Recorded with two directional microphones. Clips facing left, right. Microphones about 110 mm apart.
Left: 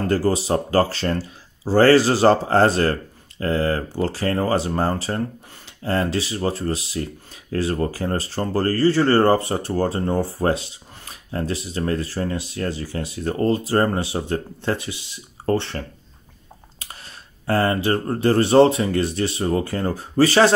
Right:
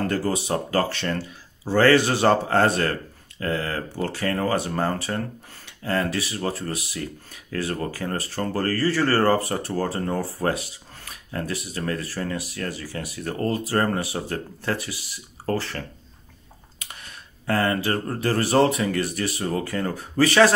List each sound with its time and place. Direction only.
0.0 s speech: 30° left (ahead or behind)
16.8 s speech: 30° left (ahead or behind)